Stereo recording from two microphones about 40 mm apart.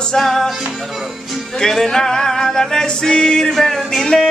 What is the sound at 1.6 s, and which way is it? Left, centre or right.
Music, centre.